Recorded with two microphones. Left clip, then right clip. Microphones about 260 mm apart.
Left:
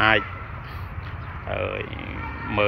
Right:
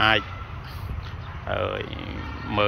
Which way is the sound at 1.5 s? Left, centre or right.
Centre.